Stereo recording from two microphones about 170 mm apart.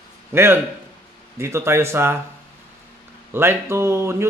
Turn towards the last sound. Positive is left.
turn(degrees=-15)  # may be behind; listen again after turning